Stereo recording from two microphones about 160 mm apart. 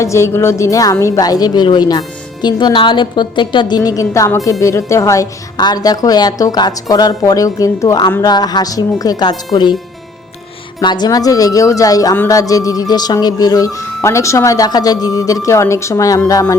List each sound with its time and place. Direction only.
0.0 s speech: 20° left (ahead or behind)
10.8 s speech: 25° left (ahead or behind)